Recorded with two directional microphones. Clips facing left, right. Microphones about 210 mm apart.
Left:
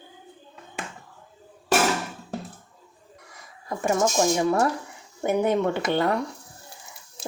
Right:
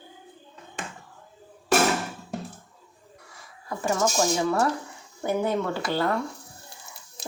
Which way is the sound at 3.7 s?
20° left (ahead or behind).